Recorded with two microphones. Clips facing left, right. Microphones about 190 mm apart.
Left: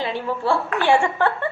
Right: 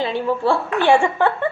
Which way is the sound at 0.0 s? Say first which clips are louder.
Right 4 dB; 20° right (ahead or behind).